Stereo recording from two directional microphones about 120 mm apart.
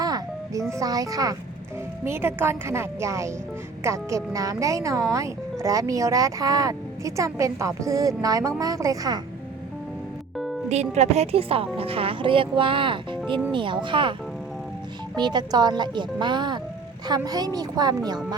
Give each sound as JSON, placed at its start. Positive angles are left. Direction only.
{"t": 0.0, "sound": "music", "side_deg": -30}
{"t": 0.7, "sound": "speech", "side_deg": -30}
{"t": 2.0, "sound": "speech", "side_deg": -20}
{"t": 10.3, "sound": "music", "side_deg": 0}
{"t": 10.7, "sound": "speech", "side_deg": -70}